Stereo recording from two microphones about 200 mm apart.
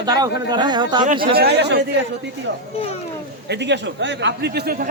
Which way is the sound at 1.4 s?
55° right (ahead or behind).